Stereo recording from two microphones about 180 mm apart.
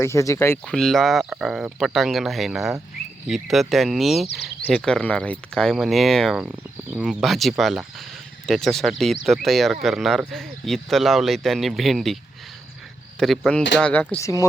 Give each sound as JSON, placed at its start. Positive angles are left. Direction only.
{"t": 0.0, "sound": "speech", "side_deg": 15}
{"t": 0.7, "sound": "speech", "side_deg": 0}